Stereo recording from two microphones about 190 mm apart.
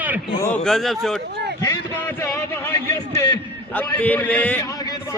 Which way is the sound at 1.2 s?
60° right (ahead or behind).